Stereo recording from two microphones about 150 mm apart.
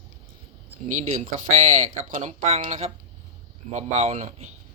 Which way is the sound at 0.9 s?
55° right (ahead or behind).